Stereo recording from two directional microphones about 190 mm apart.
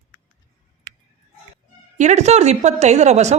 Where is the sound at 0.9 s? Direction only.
20° right (ahead or behind).